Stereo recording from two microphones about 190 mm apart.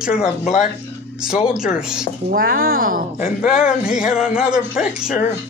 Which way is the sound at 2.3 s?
50° right (ahead or behind).